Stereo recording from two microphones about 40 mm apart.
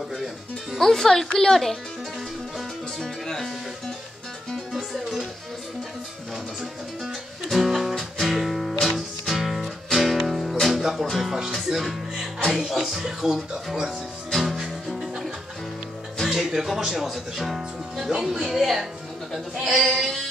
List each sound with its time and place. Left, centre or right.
0.7 s speech: centre
3.0 s speech: centre
4.7 s music: centre
7.4 s speech: centre
8.2 s music: centre
9.3 s music: centre
11.5 s speech: centre
14.3 s music: centre
16.3 s speech: centre